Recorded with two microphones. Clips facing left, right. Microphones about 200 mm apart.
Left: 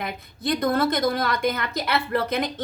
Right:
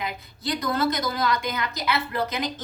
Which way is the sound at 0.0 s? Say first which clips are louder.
Left 2 dB; 55° left (ahead or behind).